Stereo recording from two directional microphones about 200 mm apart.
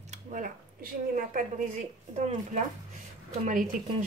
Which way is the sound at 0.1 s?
45° right (ahead or behind).